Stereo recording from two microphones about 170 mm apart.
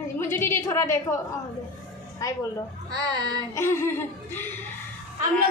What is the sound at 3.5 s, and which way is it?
A woman's voice, 15° left (ahead or behind).